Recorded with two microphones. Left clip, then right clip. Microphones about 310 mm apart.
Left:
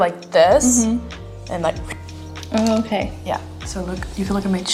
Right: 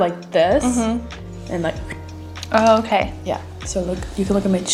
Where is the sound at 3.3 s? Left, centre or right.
Left.